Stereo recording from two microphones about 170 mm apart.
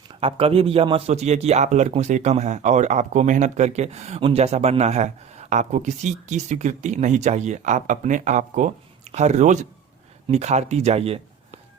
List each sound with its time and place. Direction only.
0.1 s a man's voice: 30° right (ahead or behind)